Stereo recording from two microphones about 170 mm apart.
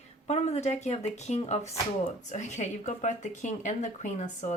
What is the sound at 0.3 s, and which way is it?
Speech, 40° left (ahead or behind).